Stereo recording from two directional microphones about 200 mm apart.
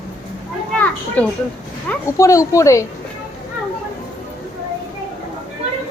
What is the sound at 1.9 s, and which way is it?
Speech, 15° left (ahead or behind).